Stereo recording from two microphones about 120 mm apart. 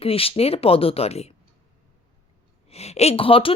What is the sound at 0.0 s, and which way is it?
Speech, 50° left (ahead or behind).